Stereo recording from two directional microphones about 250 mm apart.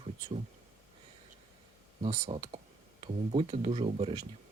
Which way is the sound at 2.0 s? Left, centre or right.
Right.